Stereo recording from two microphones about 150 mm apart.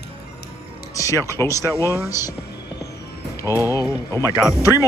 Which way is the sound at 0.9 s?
20° left (ahead or behind).